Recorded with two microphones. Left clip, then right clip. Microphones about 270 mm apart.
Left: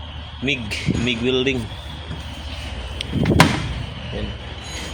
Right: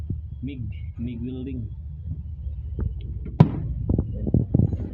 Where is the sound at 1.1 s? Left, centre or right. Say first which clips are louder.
Left 16 dB; left.